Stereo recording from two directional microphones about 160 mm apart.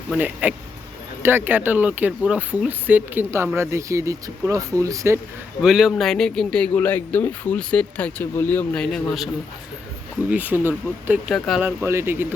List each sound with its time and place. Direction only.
0.2 s speech: 10° right (ahead or behind)
5.6 s speech: 5° right (ahead or behind)
10.2 s speech: 10° right (ahead or behind)
11.3 s speech: centre (ahead or behind)
11.6 s speech: 15° right (ahead or behind)